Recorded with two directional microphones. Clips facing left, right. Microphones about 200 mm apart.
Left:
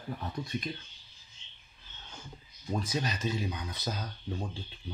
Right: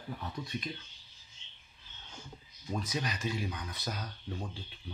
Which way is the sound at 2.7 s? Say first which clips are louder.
Left 3 dB; 30° left (ahead or behind).